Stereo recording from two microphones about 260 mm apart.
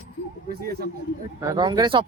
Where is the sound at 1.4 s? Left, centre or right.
Centre.